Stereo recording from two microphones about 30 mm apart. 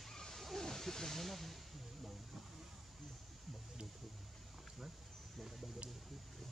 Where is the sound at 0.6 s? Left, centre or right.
Centre.